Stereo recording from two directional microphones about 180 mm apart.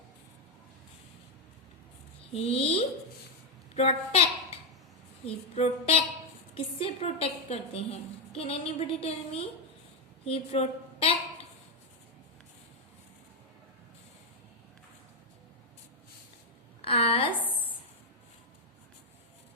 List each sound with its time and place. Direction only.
2.3 s a woman's voice: 30° left (ahead or behind)
5.2 s a woman's voice: 35° left (ahead or behind)
16.8 s a sound: 30° left (ahead or behind)